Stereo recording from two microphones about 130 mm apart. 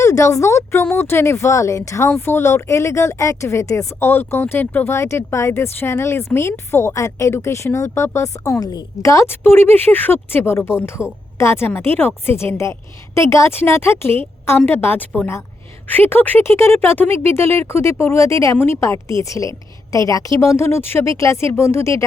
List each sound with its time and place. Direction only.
0.0 s a woman's voice: 25° left (ahead or behind)